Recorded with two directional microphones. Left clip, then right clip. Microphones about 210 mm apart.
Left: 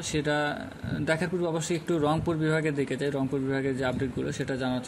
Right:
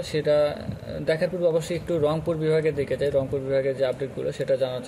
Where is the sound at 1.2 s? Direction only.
25° left (ahead or behind).